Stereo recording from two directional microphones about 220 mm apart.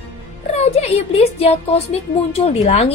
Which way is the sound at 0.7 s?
30° left (ahead or behind).